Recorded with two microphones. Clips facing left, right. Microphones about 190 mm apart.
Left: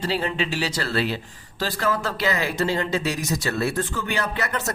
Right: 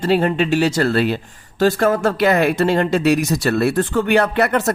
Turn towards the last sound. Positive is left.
turn(degrees=-60)  # may be behind; listen again after turning